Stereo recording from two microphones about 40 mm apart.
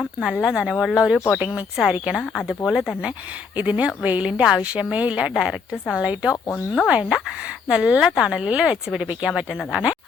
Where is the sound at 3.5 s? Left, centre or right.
Right.